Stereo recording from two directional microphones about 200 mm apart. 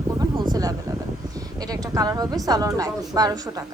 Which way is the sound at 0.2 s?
20° right (ahead or behind).